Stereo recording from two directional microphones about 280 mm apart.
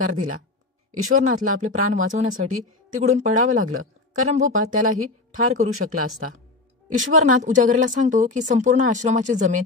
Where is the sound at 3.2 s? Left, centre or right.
Right.